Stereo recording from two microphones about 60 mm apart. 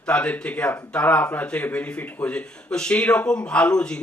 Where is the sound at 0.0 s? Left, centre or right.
Centre.